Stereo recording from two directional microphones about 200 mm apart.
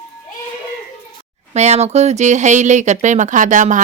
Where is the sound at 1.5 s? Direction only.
35° right (ahead or behind).